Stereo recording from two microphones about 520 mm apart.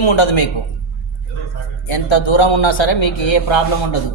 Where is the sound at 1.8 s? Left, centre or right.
Left.